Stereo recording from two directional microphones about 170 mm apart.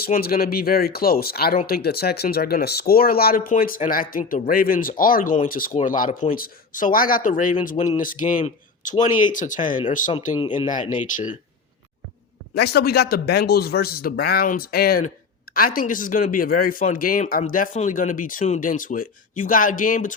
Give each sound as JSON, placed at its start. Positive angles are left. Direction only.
{"t": 0.0, "sound": "speech", "side_deg": 60}
{"t": 10.3, "sound": "speech", "side_deg": 30}
{"t": 11.1, "sound": "speech", "side_deg": 50}
{"t": 12.5, "sound": "speech", "side_deg": 70}